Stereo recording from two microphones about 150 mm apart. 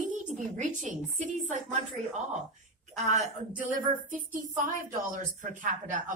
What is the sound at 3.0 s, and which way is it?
A woman's voice, 50° right (ahead or behind).